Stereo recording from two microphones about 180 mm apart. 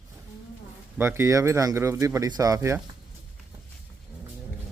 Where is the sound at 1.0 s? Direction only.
15° right (ahead or behind).